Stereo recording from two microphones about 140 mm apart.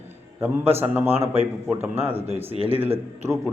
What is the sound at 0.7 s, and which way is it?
Speech, 15° right (ahead or behind).